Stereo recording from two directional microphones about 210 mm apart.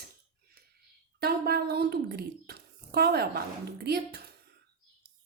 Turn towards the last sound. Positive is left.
turn(degrees=-50)  # may be behind; listen again after turning